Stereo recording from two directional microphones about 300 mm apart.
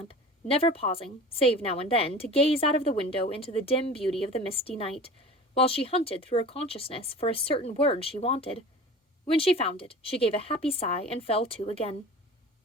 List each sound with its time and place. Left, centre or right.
0.0 s a woman's voice: centre